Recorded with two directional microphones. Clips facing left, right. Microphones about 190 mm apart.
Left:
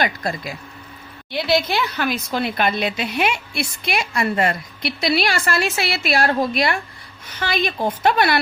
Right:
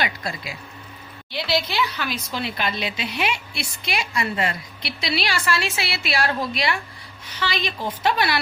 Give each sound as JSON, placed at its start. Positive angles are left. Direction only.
{"t": 0.0, "sound": "a woman's voice", "side_deg": 45}